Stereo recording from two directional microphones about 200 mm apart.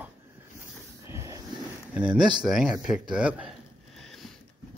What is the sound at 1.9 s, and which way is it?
A man's voice, 5° right (ahead or behind).